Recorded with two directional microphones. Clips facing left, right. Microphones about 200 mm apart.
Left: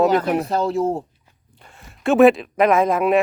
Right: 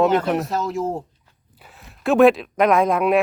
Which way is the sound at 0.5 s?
30° left (ahead or behind).